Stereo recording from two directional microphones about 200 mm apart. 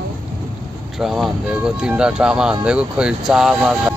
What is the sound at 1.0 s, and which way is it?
Speech, centre (ahead or behind).